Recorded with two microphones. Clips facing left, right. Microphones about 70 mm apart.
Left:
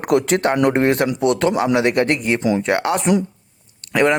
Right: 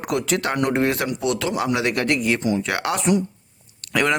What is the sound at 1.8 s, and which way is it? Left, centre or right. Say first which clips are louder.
Speech: left 4 dB; left.